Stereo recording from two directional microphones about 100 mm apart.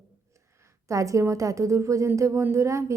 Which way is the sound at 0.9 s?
30° right (ahead or behind).